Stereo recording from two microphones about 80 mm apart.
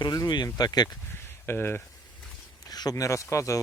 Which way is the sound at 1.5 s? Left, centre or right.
Left.